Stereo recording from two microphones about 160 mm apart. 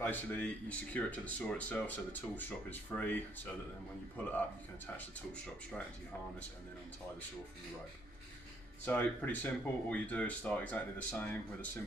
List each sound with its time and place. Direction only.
0.0 s speech: 10° left (ahead or behind)
4.9 s speech: 5° left (ahead or behind)
8.8 s speech: 10° left (ahead or behind)